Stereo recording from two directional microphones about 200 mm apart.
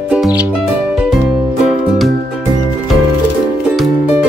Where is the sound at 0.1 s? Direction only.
5° right (ahead or behind).